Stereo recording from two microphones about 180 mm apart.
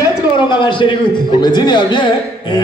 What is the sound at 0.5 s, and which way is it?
Speech, 25° left (ahead or behind).